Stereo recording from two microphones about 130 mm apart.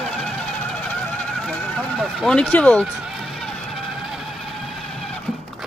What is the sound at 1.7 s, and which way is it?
Speech, centre (ahead or behind).